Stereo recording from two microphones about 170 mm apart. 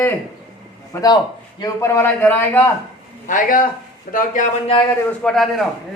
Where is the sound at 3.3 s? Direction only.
50° left (ahead or behind).